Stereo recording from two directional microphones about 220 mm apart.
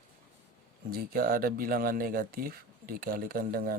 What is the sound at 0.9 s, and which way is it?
Speech, 40° right (ahead or behind).